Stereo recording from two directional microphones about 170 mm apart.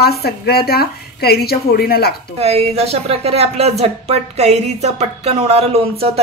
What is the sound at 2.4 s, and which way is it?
Speech, 35° right (ahead or behind).